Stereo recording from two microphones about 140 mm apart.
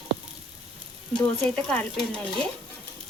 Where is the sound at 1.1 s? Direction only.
5° left (ahead or behind).